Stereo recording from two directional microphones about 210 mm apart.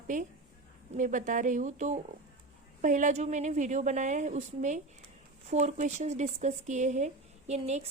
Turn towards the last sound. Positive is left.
turn(degrees=-30)  # may be behind; listen again after turning